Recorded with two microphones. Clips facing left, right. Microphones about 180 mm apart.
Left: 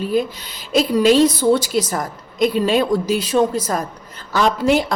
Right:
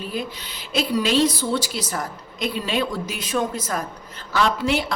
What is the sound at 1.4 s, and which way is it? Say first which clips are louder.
A woman's voice: left 9 dB; 45° left (ahead or behind).